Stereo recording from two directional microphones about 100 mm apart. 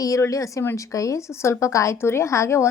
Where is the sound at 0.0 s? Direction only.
35° left (ahead or behind).